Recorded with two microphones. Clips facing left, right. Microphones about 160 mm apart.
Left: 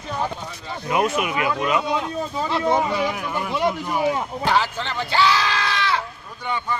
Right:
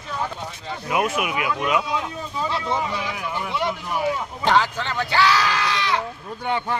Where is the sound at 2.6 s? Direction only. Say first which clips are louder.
Left 5 dB; 45° left (ahead or behind).